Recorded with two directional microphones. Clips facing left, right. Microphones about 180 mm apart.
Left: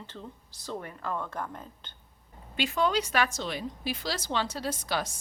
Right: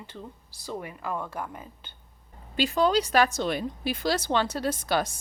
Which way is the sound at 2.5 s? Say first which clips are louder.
Right 4 dB; 35° right (ahead or behind).